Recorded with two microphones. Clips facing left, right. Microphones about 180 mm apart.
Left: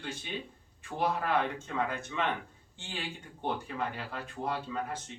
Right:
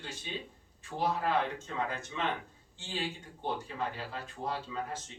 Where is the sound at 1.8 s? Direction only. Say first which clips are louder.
Left 2 dB; 55° left (ahead or behind).